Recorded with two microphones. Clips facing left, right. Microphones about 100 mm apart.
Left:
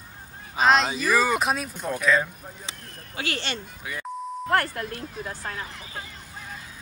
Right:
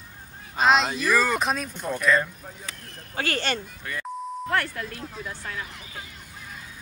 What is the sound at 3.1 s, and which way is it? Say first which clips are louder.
Speech: right 4 dB; 45° right (ahead or behind).